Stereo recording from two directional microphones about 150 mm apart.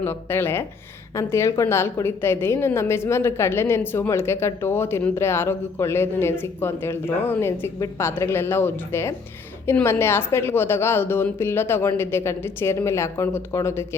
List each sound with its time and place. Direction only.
0.0 s a woman's voice: 15° left (ahead or behind)